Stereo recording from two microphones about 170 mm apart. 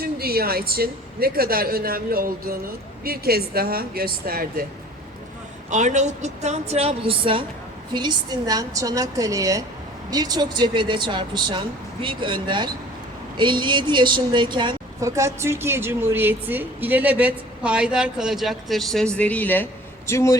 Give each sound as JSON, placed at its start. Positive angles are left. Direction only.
{"t": 0.0, "sound": "a woman's voice", "side_deg": -65}
{"t": 5.7, "sound": "a woman's voice", "side_deg": -45}